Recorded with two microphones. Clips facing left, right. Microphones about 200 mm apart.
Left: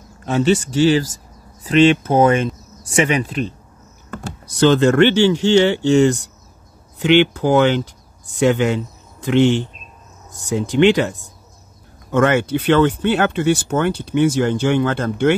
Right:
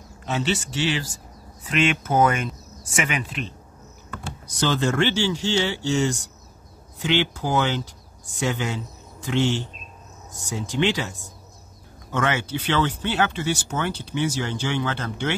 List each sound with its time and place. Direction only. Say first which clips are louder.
0.2 s speech: left 9 dB; 50° left (ahead or behind)
4.6 s speech: left 10 dB; 65° left (ahead or behind)